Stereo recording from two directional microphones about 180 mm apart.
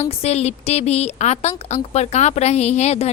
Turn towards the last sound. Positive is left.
turn(degrees=35)  # may be behind; listen again after turning